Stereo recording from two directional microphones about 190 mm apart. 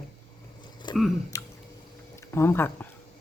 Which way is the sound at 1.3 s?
15° left (ahead or behind).